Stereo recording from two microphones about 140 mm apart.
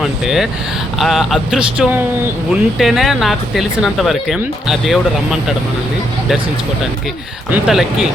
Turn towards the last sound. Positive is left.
turn(degrees=0)  # may be behind; listen again after turning